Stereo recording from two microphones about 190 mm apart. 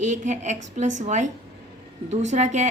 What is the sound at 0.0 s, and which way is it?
A woman's voice, 40° right (ahead or behind).